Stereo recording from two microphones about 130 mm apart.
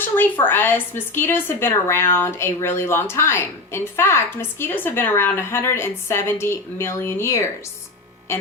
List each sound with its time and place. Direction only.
0.4 s a woman's voice: 15° left (ahead or behind)